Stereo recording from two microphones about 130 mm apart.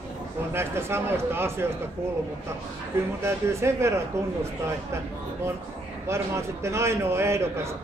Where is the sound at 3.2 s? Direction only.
20° right (ahead or behind).